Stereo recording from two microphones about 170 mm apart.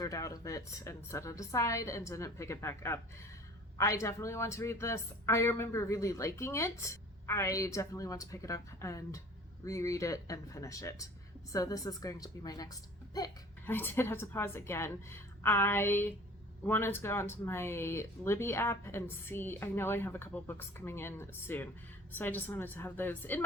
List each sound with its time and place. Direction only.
0.0 s a woman's voice: 20° left (ahead or behind)
13.7 s speech: 10° left (ahead or behind)